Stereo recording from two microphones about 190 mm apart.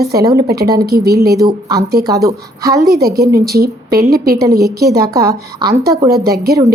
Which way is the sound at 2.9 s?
55° right (ahead or behind).